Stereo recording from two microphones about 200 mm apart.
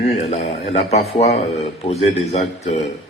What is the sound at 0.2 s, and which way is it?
A man's voice, 35° left (ahead or behind).